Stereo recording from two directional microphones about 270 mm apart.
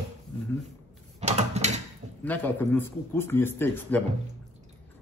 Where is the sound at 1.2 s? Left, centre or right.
Right.